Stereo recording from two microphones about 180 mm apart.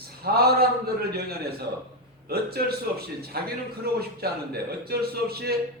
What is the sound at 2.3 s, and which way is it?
A man's voice, 60° right (ahead or behind).